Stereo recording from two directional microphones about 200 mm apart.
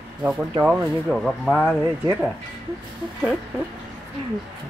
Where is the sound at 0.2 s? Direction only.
5° right (ahead or behind).